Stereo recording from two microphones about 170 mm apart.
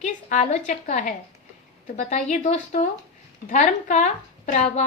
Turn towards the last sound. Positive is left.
turn(degrees=45)  # may be behind; listen again after turning